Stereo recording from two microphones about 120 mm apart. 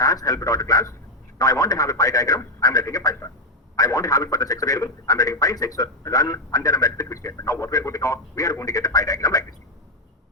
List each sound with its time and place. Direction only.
0.0 s a man's voice: 30° left (ahead or behind)